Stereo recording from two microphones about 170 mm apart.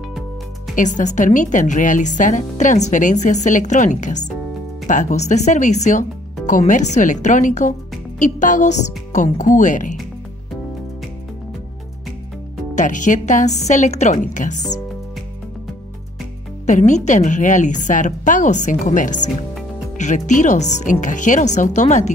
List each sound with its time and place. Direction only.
0.7 s speech: 45° left (ahead or behind)
12.7 s speech: 50° left (ahead or behind)
16.6 s speech: 45° left (ahead or behind)